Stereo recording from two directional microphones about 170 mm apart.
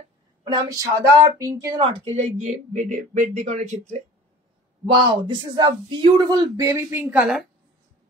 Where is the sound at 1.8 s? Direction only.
35° right (ahead or behind).